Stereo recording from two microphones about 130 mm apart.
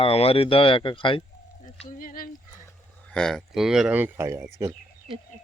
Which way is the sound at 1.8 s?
90° left.